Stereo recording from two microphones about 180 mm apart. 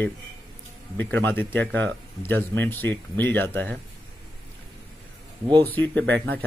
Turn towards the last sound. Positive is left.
turn(degrees=10)  # may be behind; listen again after turning